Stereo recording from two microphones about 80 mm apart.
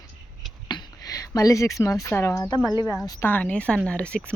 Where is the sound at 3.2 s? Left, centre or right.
Left.